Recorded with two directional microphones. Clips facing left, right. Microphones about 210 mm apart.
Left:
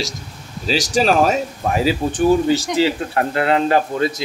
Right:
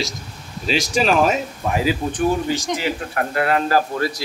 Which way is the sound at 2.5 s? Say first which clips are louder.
Left 6 dB; 30° left (ahead or behind).